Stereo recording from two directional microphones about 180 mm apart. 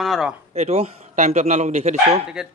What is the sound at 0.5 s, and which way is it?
A man's voice, 35° right (ahead or behind).